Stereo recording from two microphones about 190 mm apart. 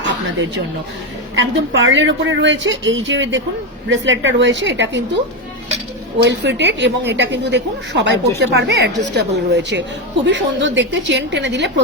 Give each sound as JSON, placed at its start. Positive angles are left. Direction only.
{"t": 1.4, "sound": "a woman's voice", "side_deg": -70}
{"t": 6.2, "sound": "a woman's voice", "side_deg": -65}